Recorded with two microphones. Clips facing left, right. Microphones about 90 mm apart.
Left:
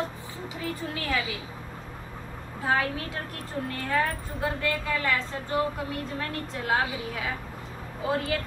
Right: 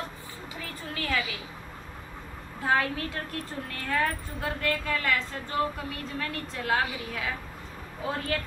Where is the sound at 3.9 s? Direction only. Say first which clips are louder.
Even; 20° left (ahead or behind).